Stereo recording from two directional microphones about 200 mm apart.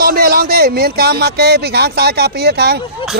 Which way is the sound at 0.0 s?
50° right (ahead or behind).